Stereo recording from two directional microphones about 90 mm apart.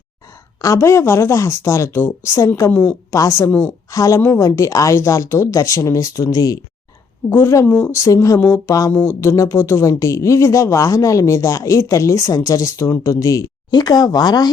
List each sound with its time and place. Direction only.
0.6 s speech: 35° left (ahead or behind)
7.3 s speech: 30° left (ahead or behind)
8.9 s speech: 20° left (ahead or behind)
9.2 s speech: 35° left (ahead or behind)
13.7 s speech: 50° left (ahead or behind)